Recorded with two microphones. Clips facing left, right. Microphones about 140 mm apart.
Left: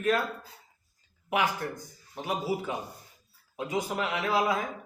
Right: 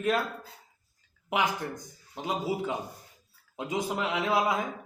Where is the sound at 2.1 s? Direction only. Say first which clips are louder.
Even; 20° right (ahead or behind).